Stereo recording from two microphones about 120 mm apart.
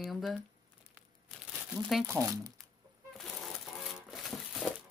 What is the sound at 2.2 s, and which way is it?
Speech, 30° right (ahead or behind).